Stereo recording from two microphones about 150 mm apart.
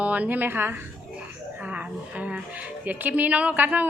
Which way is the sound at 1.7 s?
10° right (ahead or behind).